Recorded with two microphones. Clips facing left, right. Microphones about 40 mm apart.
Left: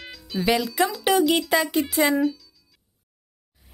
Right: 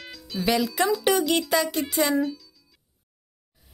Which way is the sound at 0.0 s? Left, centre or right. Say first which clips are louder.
Left 2 dB; centre.